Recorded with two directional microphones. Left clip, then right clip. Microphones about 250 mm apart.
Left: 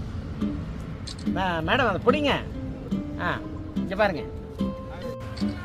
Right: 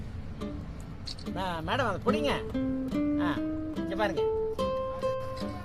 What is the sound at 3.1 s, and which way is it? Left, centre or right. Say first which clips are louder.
Music: left 6 dB; right.